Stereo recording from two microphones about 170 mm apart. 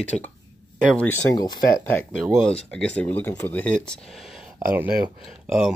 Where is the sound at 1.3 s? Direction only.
20° left (ahead or behind).